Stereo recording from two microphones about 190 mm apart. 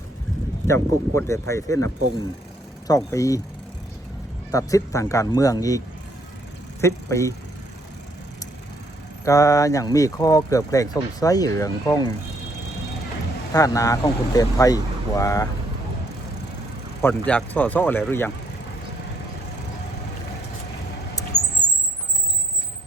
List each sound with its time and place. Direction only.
0.7 s speech: 15° left (ahead or behind)
4.5 s speech: 15° left (ahead or behind)
6.8 s speech: 15° left (ahead or behind)
9.2 s speech: 15° left (ahead or behind)
13.5 s speech: 15° left (ahead or behind)
17.0 s speech: 10° left (ahead or behind)